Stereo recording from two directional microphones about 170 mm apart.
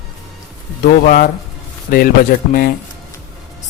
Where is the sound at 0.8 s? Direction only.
55° left (ahead or behind).